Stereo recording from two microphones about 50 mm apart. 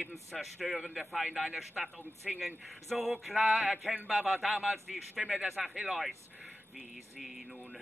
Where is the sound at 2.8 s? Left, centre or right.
Centre.